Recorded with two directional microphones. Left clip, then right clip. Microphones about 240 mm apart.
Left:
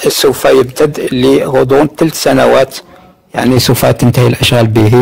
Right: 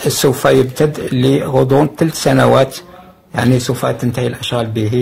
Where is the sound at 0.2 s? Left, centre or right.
Left.